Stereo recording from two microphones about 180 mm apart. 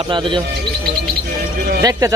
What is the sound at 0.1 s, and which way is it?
Speech, 25° right (ahead or behind).